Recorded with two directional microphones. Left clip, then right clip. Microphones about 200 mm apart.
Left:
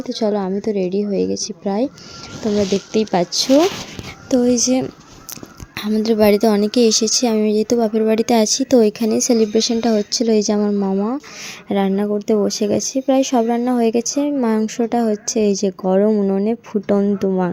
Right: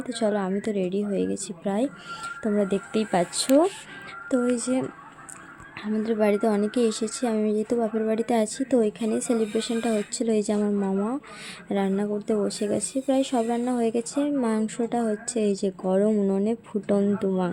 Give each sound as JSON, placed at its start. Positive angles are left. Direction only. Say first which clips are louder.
{"t": 0.2, "sound": "speech", "louder": "left 6 dB", "side_deg": 10}
{"t": 4.3, "sound": "a woman's voice", "louder": "left 9 dB", "side_deg": 20}
{"t": 5.9, "sound": "a woman's voice", "louder": "left 9 dB", "side_deg": 25}